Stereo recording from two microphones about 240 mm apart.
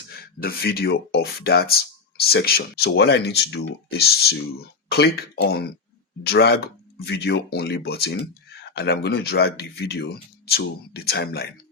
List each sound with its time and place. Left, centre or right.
0.4 s speech: left